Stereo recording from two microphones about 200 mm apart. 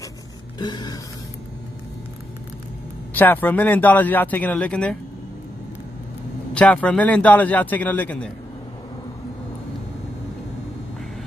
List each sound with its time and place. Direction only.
0.6 s a sound: 20° left (ahead or behind)
3.2 s speech: 10° left (ahead or behind)
6.5 s speech: 5° left (ahead or behind)